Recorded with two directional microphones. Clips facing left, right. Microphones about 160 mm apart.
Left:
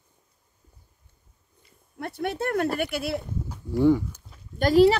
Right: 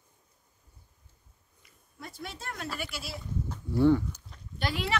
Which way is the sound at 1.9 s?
65° left (ahead or behind).